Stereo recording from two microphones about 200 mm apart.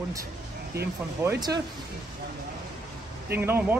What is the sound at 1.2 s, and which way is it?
Speech, 20° right (ahead or behind).